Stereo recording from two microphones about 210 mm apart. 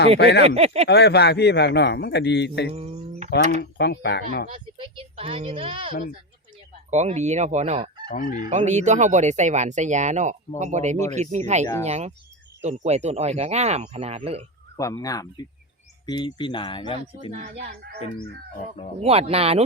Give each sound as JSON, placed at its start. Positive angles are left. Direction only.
{"t": 0.2, "sound": "a man's voice", "side_deg": 55}
{"t": 0.4, "sound": "speech", "side_deg": -30}
{"t": 0.9, "sound": "a man's voice", "side_deg": 50}
{"t": 2.7, "sound": "speech", "side_deg": -30}
{"t": 3.6, "sound": "a man's voice", "side_deg": 50}
{"t": 4.5, "sound": "speech", "side_deg": -25}
{"t": 5.9, "sound": "speech", "side_deg": 40}
{"t": 6.9, "sound": "speech", "side_deg": -35}
{"t": 14.8, "sound": "speech", "side_deg": 15}
{"t": 19.0, "sound": "speech", "side_deg": -30}